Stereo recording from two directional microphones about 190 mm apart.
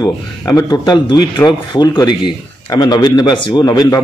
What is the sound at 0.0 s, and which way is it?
Speech, 20° left (ahead or behind).